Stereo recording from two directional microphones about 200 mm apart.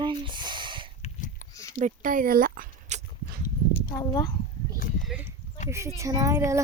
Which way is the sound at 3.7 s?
20° left (ahead or behind).